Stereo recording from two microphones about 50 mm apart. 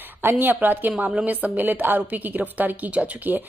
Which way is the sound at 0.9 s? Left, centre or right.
Right.